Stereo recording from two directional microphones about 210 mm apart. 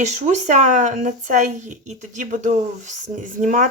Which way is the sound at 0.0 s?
35° right (ahead or behind).